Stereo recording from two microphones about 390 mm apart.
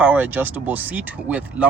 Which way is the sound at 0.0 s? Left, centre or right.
Centre.